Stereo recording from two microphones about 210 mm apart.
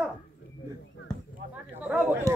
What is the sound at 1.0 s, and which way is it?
Basketball bounce, 60° left (ahead or behind).